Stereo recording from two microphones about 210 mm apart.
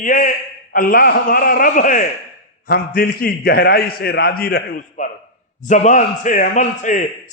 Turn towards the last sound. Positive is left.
turn(degrees=35)  # may be behind; listen again after turning